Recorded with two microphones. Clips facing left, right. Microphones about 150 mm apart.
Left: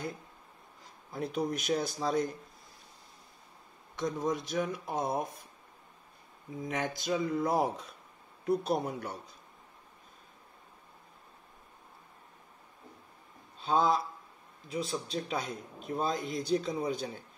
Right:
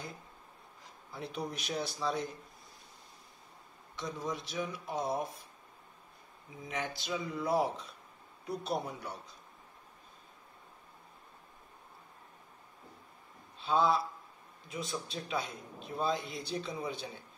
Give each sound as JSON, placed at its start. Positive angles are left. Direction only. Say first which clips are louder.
{"t": 1.1, "sound": "a man's voice", "louder": "left 7 dB", "side_deg": 45}
{"t": 3.9, "sound": "a man's voice", "louder": "left 6 dB", "side_deg": 50}
{"t": 6.7, "sound": "a man's voice", "louder": "left 4 dB", "side_deg": 45}
{"t": 13.6, "sound": "a man's voice", "louder": "left 1 dB", "side_deg": 40}